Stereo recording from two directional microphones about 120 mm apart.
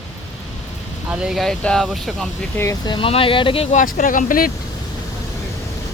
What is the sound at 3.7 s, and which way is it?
Speech, 90° left.